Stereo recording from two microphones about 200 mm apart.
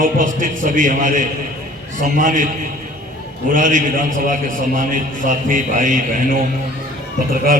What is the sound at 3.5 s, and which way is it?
A man's voice, 40° right (ahead or behind).